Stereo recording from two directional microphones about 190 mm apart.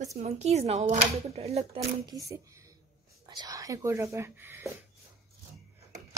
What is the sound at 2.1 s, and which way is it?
Speech, 15° right (ahead or behind).